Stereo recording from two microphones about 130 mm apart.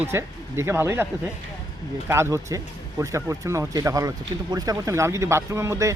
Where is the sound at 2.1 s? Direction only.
20° right (ahead or behind).